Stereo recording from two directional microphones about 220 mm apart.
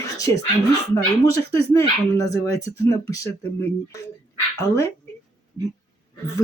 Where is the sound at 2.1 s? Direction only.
15° left (ahead or behind).